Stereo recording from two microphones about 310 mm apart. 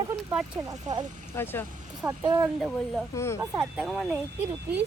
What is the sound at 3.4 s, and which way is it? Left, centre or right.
Speech, centre.